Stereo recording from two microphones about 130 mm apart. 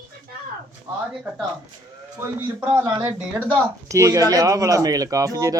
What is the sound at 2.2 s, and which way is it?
Speech, 20° right (ahead or behind).